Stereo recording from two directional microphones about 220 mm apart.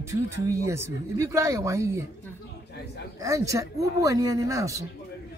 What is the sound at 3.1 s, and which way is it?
A woman's voice, 15° right (ahead or behind).